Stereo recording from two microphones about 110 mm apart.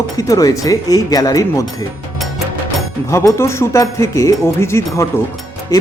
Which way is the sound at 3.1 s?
25° left (ahead or behind).